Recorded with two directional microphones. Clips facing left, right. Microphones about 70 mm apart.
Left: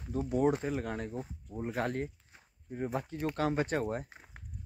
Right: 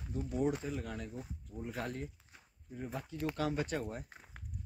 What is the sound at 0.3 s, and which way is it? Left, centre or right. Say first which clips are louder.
Speech: left 6 dB; left.